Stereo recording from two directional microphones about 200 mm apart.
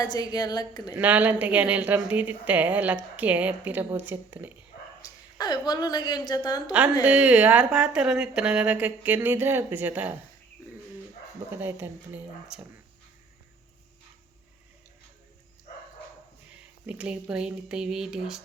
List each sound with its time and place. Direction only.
0.0 s a woman's voice: 20° left (ahead or behind)
0.9 s speech: 10° right (ahead or behind)
5.0 s a woman's voice: 20° left (ahead or behind)
7.0 s speech: 5° right (ahead or behind)
11.5 s speech: 10° right (ahead or behind)
16.8 s speech: 5° right (ahead or behind)